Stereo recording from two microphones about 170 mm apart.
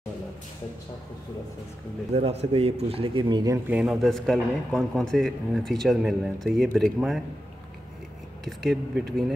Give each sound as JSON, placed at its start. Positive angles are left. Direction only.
{"t": 2.1, "sound": "speech", "side_deg": -35}
{"t": 3.6, "sound": "a man's voice", "side_deg": -5}
{"t": 8.5, "sound": "a man's voice", "side_deg": 0}